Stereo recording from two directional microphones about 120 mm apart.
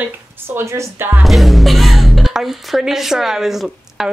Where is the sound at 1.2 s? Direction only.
Centre (ahead or behind).